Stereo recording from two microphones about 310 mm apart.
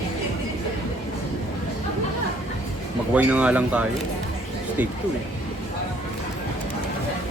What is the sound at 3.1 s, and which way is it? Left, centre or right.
Speech, centre.